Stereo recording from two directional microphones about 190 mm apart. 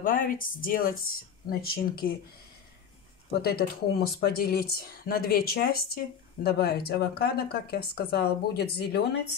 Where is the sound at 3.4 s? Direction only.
55° left (ahead or behind).